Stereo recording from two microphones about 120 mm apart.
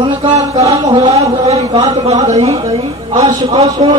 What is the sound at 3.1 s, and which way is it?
Speech, 30° right (ahead or behind).